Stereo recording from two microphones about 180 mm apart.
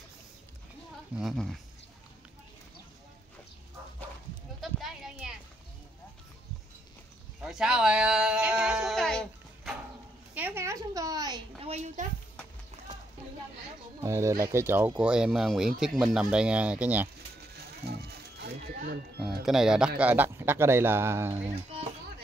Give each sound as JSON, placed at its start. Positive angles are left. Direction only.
{"t": 1.1, "sound": "speech", "side_deg": 0}
{"t": 4.6, "sound": "a sound", "side_deg": 0}
{"t": 7.4, "sound": "speech", "side_deg": -5}
{"t": 10.3, "sound": "a woman's voice", "side_deg": -10}
{"t": 11.7, "sound": "speech", "side_deg": -40}
{"t": 12.7, "sound": "clip-clop", "side_deg": -35}
{"t": 14.0, "sound": "speech", "side_deg": -15}
{"t": 17.8, "sound": "music", "side_deg": -65}
{"t": 19.2, "sound": "speech", "side_deg": 0}